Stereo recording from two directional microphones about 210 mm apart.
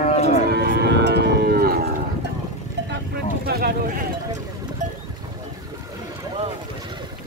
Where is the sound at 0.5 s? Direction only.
50° right (ahead or behind).